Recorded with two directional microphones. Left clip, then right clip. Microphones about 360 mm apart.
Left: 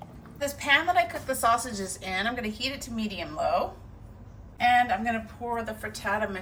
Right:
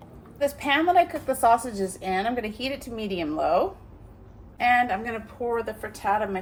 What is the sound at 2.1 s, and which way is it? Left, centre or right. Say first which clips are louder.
A woman's voice: right 2 dB; centre.